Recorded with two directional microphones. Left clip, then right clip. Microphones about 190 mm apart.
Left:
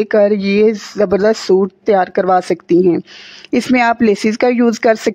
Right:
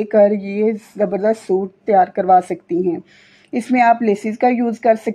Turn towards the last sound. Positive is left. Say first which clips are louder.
# left 3 dB
turn(degrees=40)  # may be behind; listen again after turning